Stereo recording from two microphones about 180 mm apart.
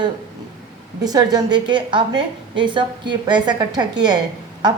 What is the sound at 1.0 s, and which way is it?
A woman's voice, 20° right (ahead or behind).